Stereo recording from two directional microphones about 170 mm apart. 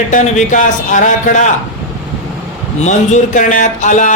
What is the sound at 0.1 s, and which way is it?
Speech, 45° left (ahead or behind).